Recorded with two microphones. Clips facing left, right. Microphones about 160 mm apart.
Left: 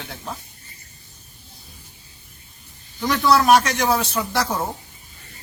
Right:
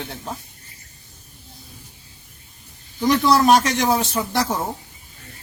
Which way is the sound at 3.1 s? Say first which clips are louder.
Right 1 dB; 20° right (ahead or behind).